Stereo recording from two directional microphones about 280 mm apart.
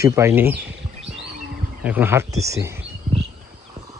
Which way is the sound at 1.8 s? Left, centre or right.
Centre.